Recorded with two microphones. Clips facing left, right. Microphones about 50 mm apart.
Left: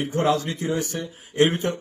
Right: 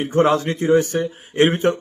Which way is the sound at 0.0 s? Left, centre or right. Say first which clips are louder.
Right 5 dB; right.